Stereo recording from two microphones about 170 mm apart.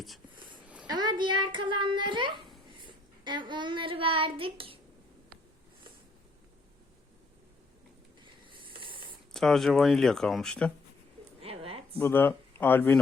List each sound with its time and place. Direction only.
0.9 s a child's voice: 25° right (ahead or behind)
2.7 s child singing: 30° right (ahead or behind)
8.2 s hiss: 30° right (ahead or behind)
9.3 s speech: centre (ahead or behind)
11.3 s a sound: 35° right (ahead or behind)
12.0 s speech: 10° left (ahead or behind)